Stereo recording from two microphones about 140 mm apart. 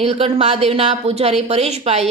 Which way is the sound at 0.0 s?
45° right (ahead or behind).